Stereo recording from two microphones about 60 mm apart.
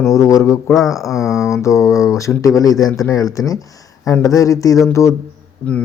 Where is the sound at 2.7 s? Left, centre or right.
Centre.